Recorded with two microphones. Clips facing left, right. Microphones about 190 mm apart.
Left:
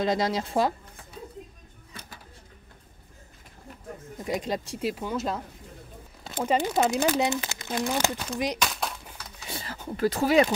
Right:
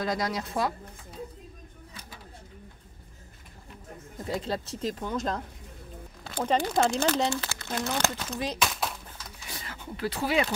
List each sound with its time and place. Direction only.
0.0 s a woman's voice: 25° left (ahead or behind)
4.2 s speech: 15° left (ahead or behind)
6.4 s speech: 10° left (ahead or behind)
8.5 s a sound: centre (ahead or behind)
9.5 s speech: 35° left (ahead or behind)